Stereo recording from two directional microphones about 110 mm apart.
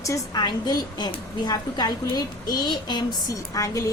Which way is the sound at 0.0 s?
35° left (ahead or behind).